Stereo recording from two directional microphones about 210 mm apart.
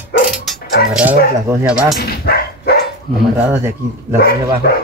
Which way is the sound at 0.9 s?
10° right (ahead or behind).